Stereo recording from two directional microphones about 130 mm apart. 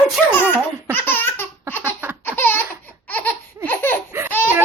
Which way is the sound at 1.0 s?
15° left (ahead or behind).